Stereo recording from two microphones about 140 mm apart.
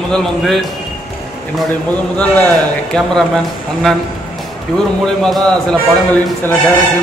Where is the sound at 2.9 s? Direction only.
5° left (ahead or behind).